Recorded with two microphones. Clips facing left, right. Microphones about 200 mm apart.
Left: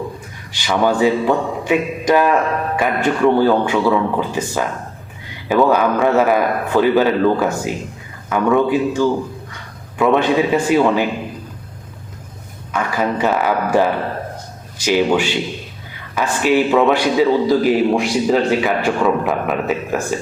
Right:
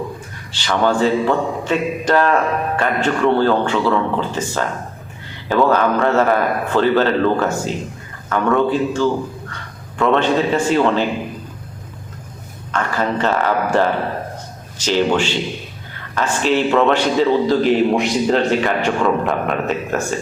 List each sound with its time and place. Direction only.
0.5 s a man's voice: 10° left (ahead or behind)
12.7 s a man's voice: 10° left (ahead or behind)